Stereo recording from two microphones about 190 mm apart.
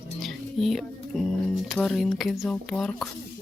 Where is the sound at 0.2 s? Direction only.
Centre (ahead or behind).